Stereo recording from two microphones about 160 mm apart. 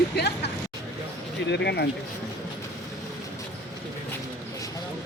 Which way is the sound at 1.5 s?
90° left.